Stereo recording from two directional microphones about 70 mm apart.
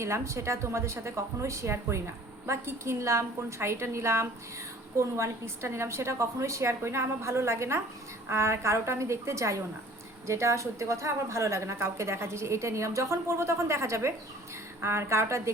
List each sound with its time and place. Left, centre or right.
0.0 s a woman's voice: right